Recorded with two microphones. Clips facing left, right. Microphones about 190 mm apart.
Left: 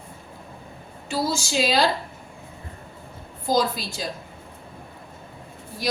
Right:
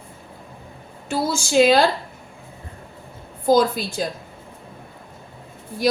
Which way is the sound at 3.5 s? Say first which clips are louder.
Right 6 dB; 50° right (ahead or behind).